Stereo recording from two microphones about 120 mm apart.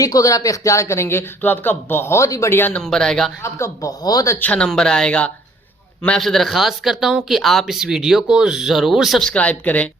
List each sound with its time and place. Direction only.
0.0 s speech: 30° left (ahead or behind)
2.8 s speech: 5° left (ahead or behind)
3.4 s speech: 25° left (ahead or behind)
4.4 s speech: 10° left (ahead or behind)